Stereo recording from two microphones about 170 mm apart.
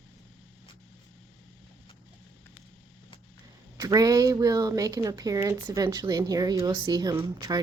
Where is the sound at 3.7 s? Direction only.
20° right (ahead or behind).